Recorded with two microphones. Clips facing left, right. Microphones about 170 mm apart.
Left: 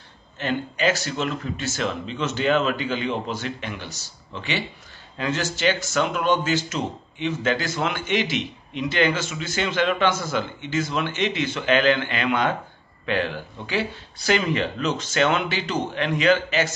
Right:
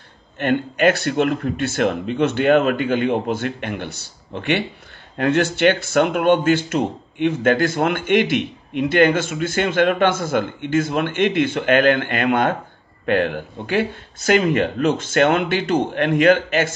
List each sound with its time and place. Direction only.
0.4 s a man's voice: 60° right (ahead or behind)